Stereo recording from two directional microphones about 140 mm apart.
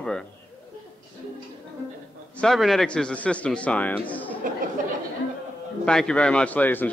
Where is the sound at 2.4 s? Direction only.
Centre (ahead or behind).